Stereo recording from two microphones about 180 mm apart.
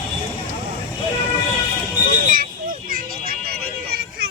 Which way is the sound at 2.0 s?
50° right (ahead or behind).